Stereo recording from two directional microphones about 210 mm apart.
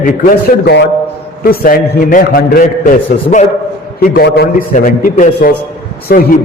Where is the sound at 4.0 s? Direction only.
50° left (ahead or behind).